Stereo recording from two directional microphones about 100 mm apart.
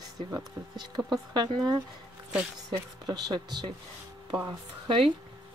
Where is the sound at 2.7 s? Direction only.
40° right (ahead or behind).